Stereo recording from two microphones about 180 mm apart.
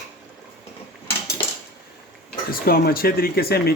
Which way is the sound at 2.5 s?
55° left (ahead or behind).